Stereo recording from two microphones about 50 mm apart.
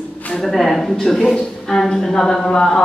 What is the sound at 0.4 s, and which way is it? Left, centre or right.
A woman's voice, centre.